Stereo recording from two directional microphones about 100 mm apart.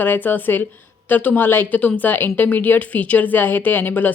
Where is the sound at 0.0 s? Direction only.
20° left (ahead or behind).